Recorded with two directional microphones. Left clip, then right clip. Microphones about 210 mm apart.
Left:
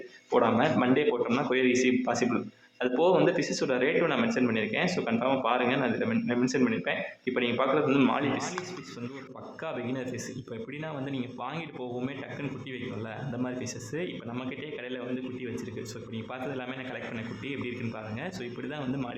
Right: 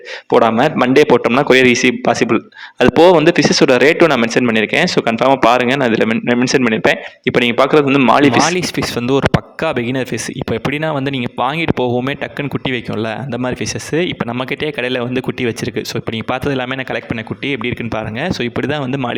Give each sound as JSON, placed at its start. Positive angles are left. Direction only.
{"t": 0.3, "sound": "speech", "side_deg": -45}
{"t": 14.5, "sound": "speech", "side_deg": -50}